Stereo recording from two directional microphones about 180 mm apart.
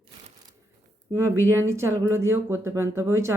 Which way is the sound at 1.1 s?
15° right (ahead or behind).